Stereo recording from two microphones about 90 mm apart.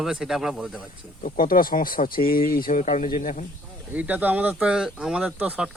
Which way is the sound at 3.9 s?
20° right (ahead or behind).